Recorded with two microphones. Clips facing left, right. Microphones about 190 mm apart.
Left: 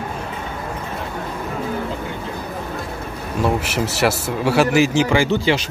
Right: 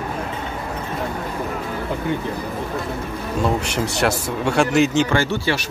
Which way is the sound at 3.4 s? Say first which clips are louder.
Left 1 dB; 5° left (ahead or behind).